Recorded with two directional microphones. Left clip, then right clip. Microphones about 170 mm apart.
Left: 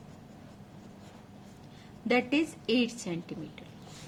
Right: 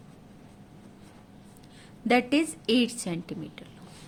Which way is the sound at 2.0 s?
65° right (ahead or behind).